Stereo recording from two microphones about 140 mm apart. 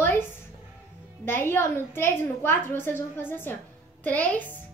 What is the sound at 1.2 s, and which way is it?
A woman's voice, 15° left (ahead or behind).